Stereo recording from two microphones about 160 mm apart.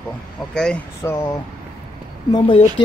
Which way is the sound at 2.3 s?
35° left (ahead or behind).